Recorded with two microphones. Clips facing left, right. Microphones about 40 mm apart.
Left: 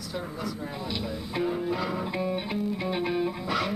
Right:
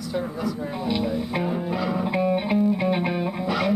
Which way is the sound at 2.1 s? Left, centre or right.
Centre.